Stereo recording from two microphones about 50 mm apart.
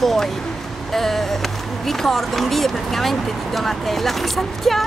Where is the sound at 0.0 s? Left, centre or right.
Centre.